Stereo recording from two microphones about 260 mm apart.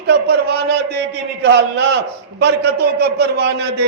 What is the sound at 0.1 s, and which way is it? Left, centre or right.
A man's voice, right.